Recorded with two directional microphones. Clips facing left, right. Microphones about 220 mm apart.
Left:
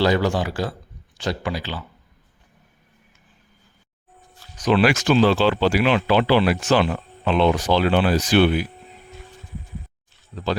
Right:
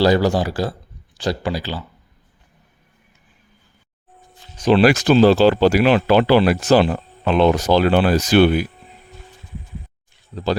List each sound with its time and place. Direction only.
0.0 s speech: 35° right (ahead or behind)
4.5 s speech: 30° right (ahead or behind)
10.3 s speech: 35° right (ahead or behind)